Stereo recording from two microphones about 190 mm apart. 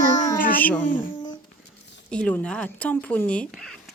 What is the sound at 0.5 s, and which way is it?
Speech, 10° left (ahead or behind).